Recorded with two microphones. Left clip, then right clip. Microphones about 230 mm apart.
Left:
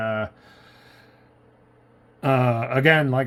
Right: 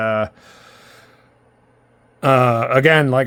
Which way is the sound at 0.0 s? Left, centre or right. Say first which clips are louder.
Right 7 dB; right.